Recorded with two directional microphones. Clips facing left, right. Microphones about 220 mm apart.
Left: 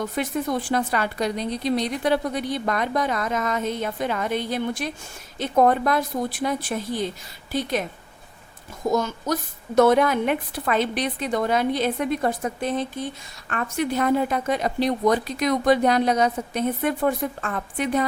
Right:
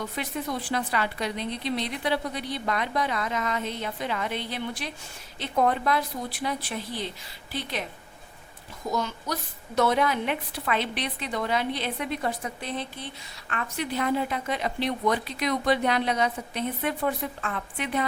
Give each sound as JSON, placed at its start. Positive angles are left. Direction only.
{"t": 0.0, "sound": "a woman's voice", "side_deg": 45}
{"t": 8.9, "sound": "a woman's voice", "side_deg": 45}